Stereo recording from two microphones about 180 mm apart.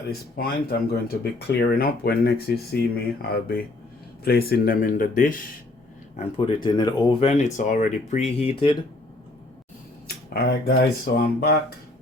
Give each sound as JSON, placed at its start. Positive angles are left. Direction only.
{"t": 0.3, "sound": "speech", "side_deg": 60}
{"t": 6.1, "sound": "speech", "side_deg": 30}
{"t": 10.2, "sound": "speech", "side_deg": 60}